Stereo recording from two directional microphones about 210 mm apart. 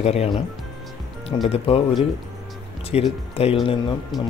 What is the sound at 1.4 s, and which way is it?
Speech, 30° left (ahead or behind).